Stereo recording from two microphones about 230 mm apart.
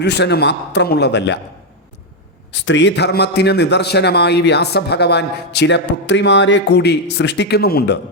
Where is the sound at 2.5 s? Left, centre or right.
Left.